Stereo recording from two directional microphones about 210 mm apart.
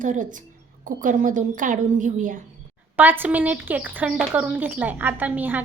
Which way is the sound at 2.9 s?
10° right (ahead or behind).